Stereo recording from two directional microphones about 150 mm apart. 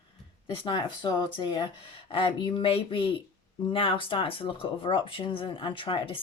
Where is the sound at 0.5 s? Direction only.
35° left (ahead or behind).